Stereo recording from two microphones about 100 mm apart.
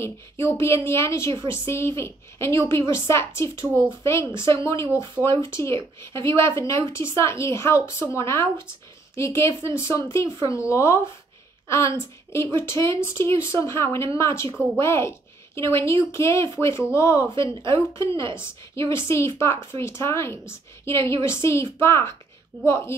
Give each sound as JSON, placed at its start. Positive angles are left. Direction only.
{"t": 0.0, "sound": "a woman's voice", "side_deg": 25}
{"t": 5.2, "sound": "speech", "side_deg": 0}
{"t": 5.5, "sound": "a woman's voice", "side_deg": 30}